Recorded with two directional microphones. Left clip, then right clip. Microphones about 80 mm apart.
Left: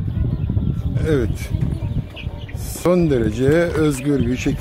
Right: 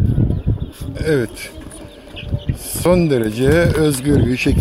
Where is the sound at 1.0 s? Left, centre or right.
Left.